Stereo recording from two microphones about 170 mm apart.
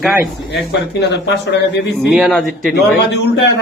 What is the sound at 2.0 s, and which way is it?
Speech, centre (ahead or behind).